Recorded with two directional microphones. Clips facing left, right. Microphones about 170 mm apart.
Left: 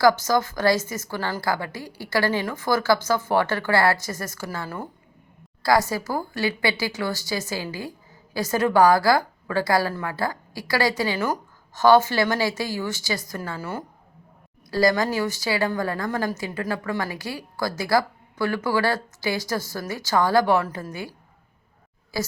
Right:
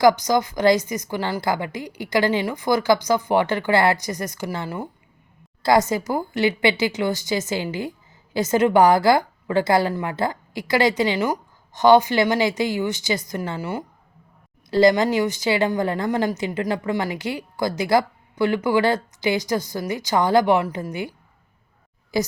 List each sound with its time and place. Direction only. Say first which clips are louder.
0.0 s a woman's voice: right 2 dB; 15° right (ahead or behind)